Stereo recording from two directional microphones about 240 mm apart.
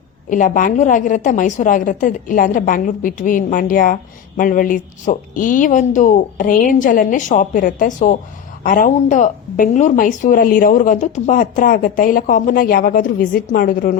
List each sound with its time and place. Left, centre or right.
0.3 s a woman's voice: left